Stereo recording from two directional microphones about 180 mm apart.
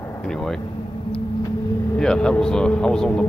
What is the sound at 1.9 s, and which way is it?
Speech, 5° left (ahead or behind).